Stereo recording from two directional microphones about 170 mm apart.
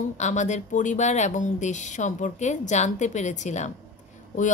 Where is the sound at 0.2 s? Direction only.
45° left (ahead or behind).